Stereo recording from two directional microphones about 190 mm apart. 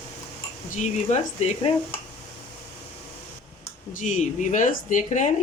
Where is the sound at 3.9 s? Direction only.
40° left (ahead or behind).